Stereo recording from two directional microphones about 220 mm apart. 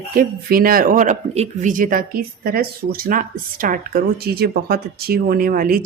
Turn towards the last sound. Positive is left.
turn(degrees=-40)  # may be behind; listen again after turning